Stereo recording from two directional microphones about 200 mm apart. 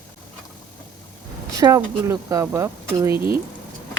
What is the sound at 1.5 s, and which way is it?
Speech, 15° right (ahead or behind).